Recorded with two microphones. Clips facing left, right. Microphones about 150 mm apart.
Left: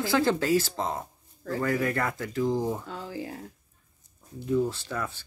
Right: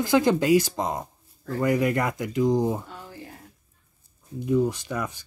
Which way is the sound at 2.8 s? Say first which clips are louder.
Left 5 dB; 90° left.